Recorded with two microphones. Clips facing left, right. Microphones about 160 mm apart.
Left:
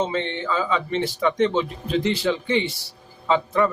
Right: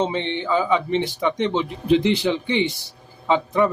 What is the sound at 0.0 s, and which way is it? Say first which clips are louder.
A man's voice: right 1 dB; 20° right (ahead or behind).